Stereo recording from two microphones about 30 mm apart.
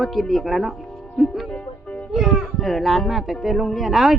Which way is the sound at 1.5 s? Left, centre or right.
Left.